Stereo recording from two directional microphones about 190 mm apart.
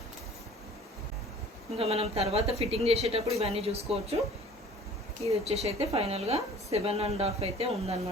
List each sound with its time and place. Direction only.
1.8 s a woman's voice: 30° right (ahead or behind)
5.2 s a woman's voice: 35° right (ahead or behind)